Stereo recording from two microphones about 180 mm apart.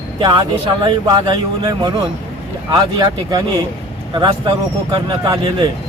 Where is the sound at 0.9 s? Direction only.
25° right (ahead or behind).